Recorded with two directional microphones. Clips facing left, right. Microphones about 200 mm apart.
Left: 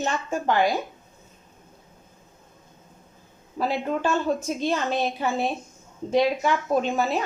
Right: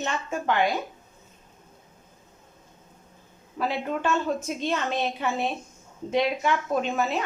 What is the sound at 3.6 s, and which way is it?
A woman's voice, 35° left (ahead or behind).